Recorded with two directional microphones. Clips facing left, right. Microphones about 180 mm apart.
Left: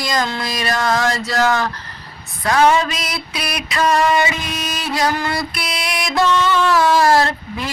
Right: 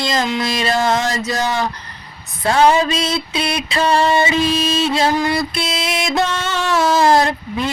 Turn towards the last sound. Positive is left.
turn(degrees=-20)  # may be behind; listen again after turning